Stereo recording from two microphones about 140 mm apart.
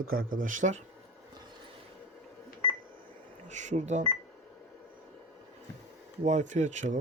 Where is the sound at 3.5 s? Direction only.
60° right (ahead or behind).